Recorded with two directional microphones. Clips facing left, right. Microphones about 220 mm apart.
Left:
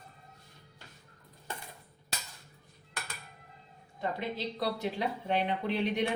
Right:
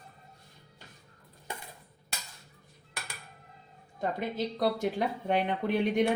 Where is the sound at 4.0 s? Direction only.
45° right (ahead or behind).